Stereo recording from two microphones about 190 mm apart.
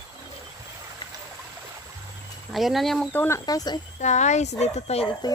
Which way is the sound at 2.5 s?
Centre (ahead or behind).